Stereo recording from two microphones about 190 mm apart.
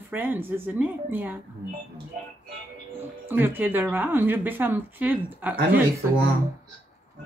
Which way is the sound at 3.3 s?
10° right (ahead or behind).